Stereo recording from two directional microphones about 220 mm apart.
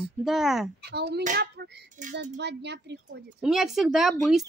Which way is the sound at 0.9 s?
50° right (ahead or behind).